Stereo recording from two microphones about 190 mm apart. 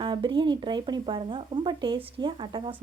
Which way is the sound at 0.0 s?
25° right (ahead or behind).